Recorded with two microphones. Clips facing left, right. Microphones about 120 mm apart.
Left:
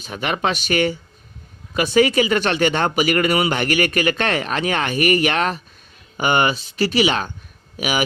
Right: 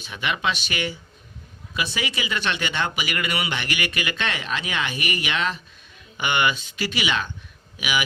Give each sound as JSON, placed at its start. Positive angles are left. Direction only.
{"t": 0.0, "sound": "speech", "side_deg": 45}